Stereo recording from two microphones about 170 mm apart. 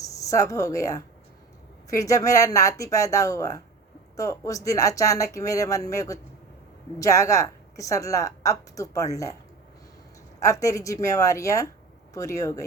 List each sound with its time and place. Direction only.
0.0 s a woman's voice: 20° left (ahead or behind)
10.4 s a woman's voice: 20° left (ahead or behind)